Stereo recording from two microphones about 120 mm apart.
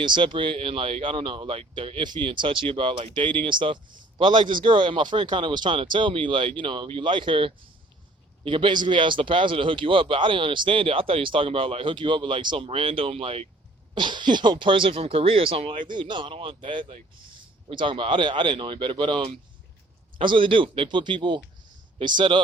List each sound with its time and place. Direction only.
0.0 s speech: 40° right (ahead or behind)
13.9 s speech: 40° right (ahead or behind)